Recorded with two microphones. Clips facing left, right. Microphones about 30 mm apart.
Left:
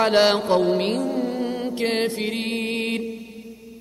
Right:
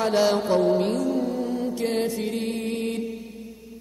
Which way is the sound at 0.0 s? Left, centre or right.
Left.